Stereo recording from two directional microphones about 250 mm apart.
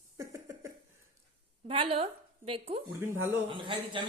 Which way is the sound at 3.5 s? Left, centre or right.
Centre.